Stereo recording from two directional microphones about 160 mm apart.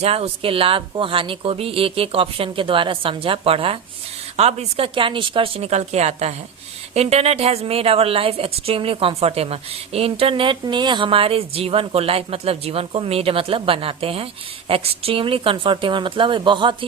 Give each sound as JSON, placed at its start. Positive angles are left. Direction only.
{"t": 0.0, "sound": "a woman's voice", "side_deg": -40}